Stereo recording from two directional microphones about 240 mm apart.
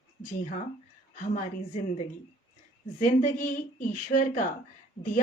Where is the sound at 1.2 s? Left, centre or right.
Left.